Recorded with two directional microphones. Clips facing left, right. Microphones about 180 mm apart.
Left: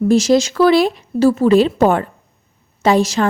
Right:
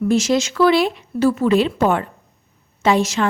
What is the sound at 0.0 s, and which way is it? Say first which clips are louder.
Speech: left 4 dB; 35° left (ahead or behind).